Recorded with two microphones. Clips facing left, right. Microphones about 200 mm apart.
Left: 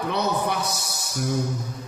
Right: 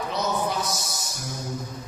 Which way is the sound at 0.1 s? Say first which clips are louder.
Left 2 dB; 60° left (ahead or behind).